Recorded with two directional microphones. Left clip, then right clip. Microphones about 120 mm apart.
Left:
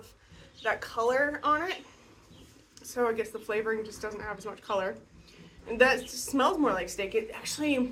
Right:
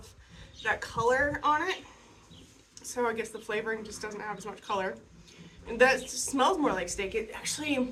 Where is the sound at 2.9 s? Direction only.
30° right (ahead or behind).